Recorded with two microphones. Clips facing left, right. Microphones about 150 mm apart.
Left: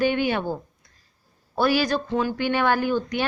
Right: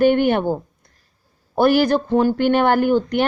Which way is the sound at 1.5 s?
55° right (ahead or behind).